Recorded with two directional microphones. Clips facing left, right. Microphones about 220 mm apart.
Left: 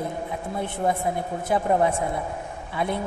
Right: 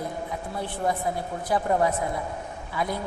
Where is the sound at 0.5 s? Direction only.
20° left (ahead or behind).